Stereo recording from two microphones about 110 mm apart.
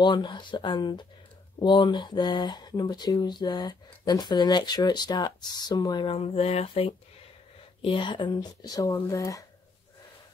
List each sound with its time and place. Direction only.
0.0 s speech: 45° left (ahead or behind); by 7.0 s 65° left (ahead or behind)
7.8 s speech: 50° left (ahead or behind); by 9.4 s 30° left (ahead or behind)